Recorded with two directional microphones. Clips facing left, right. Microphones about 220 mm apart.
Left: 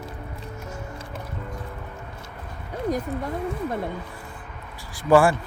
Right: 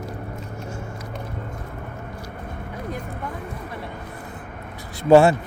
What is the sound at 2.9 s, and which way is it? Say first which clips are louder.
Speech: left 8 dB; 40° left (ahead or behind).